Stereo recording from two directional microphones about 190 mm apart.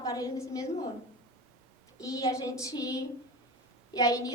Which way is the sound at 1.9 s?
20° left (ahead or behind).